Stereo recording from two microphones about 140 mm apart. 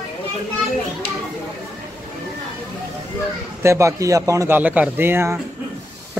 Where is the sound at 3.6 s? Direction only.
20° right (ahead or behind).